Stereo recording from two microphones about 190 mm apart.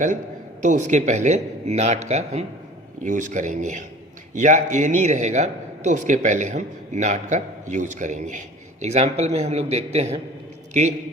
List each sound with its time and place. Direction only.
0.6 s a man's voice: 40° right (ahead or behind)